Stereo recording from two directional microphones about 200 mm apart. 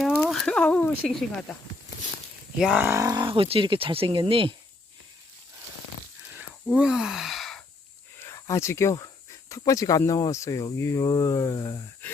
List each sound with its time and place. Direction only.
0.0 s speech: centre (ahead or behind)
2.6 s speech: 5° right (ahead or behind); by 4.5 s 25° right (ahead or behind)
6.7 s speech: 5° right (ahead or behind)
8.2 s speech: 15° left (ahead or behind)